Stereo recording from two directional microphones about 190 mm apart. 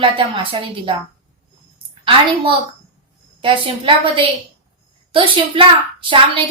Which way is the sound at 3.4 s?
25° right (ahead or behind).